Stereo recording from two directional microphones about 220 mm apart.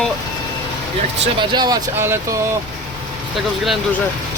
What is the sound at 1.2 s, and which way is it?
Speech, 20° right (ahead or behind).